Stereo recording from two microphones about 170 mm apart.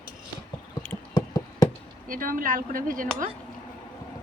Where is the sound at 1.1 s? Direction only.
25° left (ahead or behind).